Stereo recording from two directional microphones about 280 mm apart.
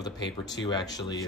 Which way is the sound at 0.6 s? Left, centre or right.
Centre.